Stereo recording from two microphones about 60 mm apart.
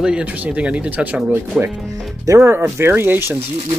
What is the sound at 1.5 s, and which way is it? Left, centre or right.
Speech, centre.